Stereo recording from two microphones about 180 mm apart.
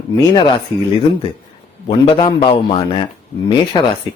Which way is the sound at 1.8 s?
25° left (ahead or behind).